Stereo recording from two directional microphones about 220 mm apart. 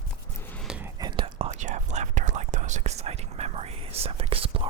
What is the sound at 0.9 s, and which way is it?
Whispering, 20° right (ahead or behind).